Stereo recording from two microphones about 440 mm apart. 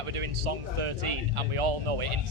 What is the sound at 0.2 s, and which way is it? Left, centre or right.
Speech, right.